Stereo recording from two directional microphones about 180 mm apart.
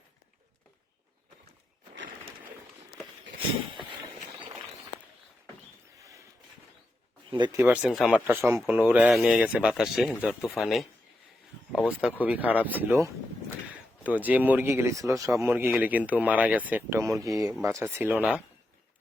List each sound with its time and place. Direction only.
7.3 s speech: 25° right (ahead or behind)
7.5 s speech: 10° right (ahead or behind)